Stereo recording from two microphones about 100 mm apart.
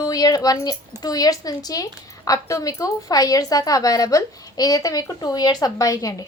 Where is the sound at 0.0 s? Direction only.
40° left (ahead or behind).